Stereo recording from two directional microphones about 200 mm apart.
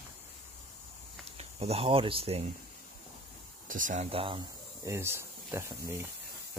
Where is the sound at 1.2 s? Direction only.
30° right (ahead or behind).